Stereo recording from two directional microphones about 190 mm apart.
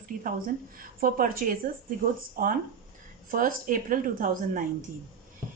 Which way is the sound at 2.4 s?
50° right (ahead or behind).